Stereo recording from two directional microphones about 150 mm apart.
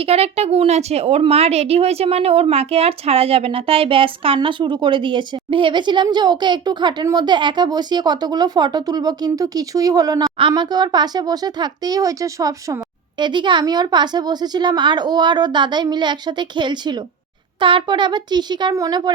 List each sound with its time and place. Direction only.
0.0 s a woman's voice: 45° right (ahead or behind)